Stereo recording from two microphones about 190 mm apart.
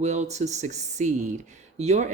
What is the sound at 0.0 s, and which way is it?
Speech, 35° right (ahead or behind).